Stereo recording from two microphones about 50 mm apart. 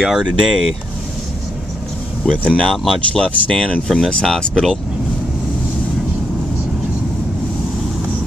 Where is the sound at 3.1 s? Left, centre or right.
Centre.